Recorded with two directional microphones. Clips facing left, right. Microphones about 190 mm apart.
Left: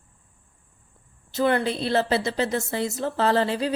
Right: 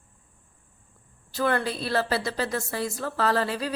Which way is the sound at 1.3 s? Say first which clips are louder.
Left 3 dB; 20° left (ahead or behind).